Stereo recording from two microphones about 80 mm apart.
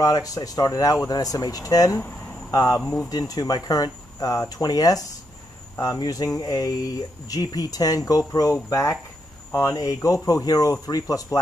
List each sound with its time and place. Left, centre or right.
0.0 s speech: left